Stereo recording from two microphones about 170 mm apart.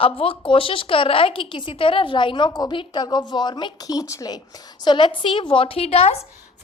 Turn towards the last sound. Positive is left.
turn(degrees=35)  # may be behind; listen again after turning